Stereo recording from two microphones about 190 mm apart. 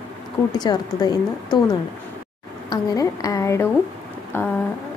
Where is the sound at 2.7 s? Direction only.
15° left (ahead or behind).